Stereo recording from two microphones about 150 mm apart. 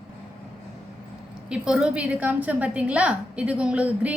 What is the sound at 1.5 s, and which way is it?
A woman's voice, 5° right (ahead or behind).